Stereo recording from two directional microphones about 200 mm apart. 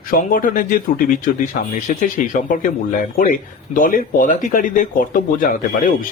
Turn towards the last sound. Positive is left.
turn(degrees=45)  # may be behind; listen again after turning